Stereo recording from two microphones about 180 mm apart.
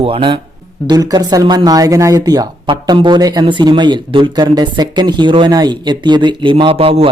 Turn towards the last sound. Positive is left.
turn(degrees=-35)  # may be behind; listen again after turning